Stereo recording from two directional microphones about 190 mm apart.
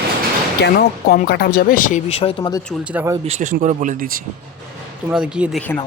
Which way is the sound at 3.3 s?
40° right (ahead or behind).